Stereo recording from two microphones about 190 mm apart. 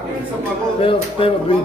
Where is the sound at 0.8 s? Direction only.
30° left (ahead or behind).